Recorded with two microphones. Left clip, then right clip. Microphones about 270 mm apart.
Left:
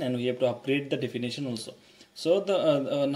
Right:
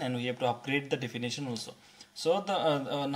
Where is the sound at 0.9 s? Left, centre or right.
Right.